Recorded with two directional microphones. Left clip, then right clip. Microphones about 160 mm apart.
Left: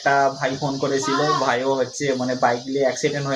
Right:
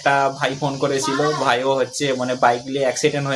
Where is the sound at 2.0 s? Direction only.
15° right (ahead or behind).